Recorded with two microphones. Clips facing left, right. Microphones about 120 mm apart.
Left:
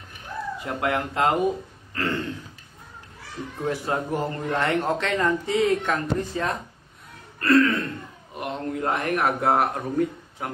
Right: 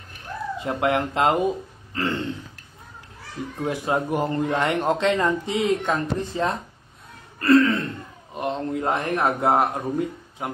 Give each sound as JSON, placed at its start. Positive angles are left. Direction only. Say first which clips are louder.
{"t": 0.6, "sound": "speech", "louder": "right 4 dB", "side_deg": -25}
{"t": 3.6, "sound": "a man's voice", "louder": "right 2 dB", "side_deg": -15}
{"t": 7.3, "sound": "throat clearing", "louder": "right 2 dB", "side_deg": -30}
{"t": 8.4, "sound": "a man's voice", "louder": "right 3 dB", "side_deg": -25}